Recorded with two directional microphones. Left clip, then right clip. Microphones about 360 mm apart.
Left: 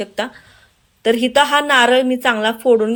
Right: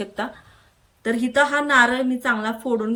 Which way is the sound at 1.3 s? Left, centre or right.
Centre.